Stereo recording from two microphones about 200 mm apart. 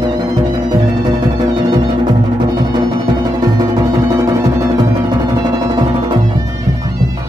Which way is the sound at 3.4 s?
20° right (ahead or behind).